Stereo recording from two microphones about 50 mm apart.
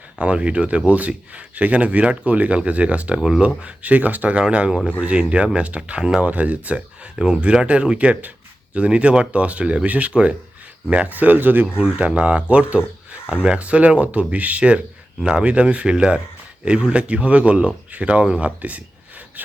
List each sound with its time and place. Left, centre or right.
0.2 s speech: right
3.2 s speech: centre
3.6 s speech: right
7.2 s speech: centre; by 11.6 s right
11.9 s speech: right